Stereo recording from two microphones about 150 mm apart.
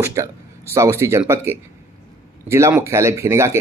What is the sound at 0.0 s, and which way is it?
Speech, 20° right (ahead or behind).